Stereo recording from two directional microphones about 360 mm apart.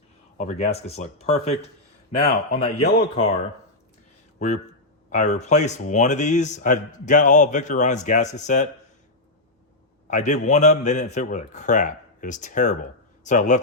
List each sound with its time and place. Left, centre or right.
0.3 s speech: centre
4.4 s a man's voice: centre
10.1 s a man's voice: centre